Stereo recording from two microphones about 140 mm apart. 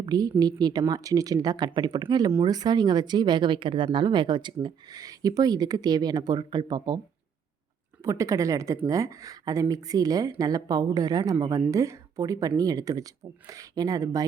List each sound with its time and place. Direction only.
0.0 s speech: 30° right (ahead or behind)
8.0 s speech: 20° right (ahead or behind)